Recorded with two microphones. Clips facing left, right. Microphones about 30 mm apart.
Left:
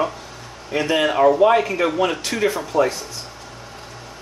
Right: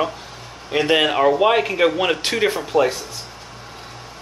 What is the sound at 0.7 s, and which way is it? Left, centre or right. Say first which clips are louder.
Speech: right 2 dB; right.